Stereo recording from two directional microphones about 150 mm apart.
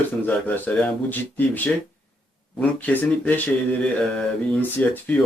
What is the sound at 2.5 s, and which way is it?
Speech, 10° left (ahead or behind).